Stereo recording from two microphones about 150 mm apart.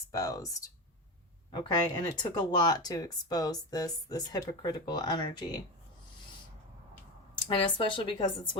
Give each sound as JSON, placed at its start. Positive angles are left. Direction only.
{"t": 0.1, "sound": "speech", "side_deg": 25}
{"t": 7.5, "sound": "speech", "side_deg": 35}